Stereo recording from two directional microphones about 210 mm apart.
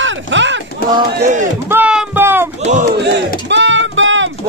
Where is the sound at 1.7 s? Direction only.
5° right (ahead or behind).